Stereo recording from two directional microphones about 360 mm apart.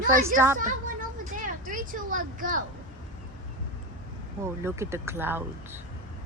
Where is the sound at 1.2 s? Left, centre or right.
Right.